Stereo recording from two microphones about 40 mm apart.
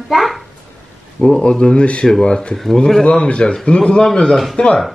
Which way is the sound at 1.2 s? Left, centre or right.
Left.